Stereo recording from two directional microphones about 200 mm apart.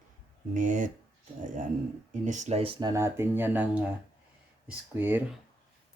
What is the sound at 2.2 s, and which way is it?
Speech, 35° right (ahead or behind).